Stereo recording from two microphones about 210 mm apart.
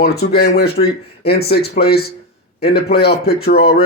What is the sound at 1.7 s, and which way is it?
Speech, 25° left (ahead or behind).